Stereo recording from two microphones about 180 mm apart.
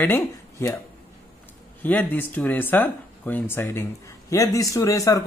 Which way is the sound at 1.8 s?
10° left (ahead or behind).